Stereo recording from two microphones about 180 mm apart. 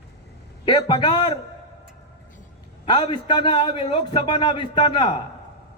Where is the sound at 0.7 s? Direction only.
25° left (ahead or behind).